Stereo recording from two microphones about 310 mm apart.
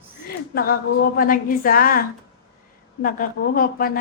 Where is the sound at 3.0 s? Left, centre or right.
Left.